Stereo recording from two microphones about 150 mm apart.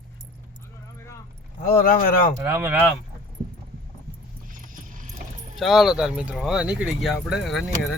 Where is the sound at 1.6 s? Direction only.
75° left (ahead or behind).